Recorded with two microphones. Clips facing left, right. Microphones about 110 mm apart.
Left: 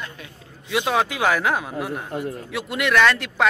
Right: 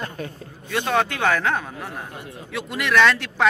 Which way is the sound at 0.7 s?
5° left (ahead or behind).